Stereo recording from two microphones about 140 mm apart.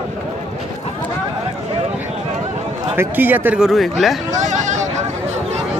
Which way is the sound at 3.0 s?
15° right (ahead or behind).